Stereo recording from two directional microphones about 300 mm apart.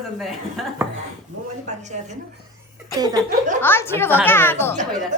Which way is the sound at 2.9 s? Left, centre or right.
Centre.